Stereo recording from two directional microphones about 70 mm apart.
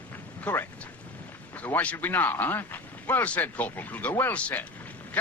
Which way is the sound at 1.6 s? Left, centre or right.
Left.